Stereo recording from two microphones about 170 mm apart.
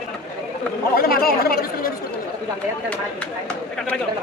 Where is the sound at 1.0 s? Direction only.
65° left (ahead or behind).